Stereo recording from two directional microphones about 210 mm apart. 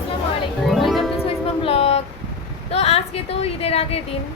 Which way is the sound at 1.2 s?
25° left (ahead or behind).